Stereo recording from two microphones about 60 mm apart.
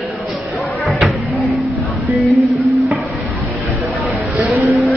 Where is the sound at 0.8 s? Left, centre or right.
Centre.